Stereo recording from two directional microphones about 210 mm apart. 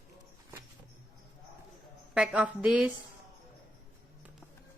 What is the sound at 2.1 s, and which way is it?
Speech, 5° right (ahead or behind).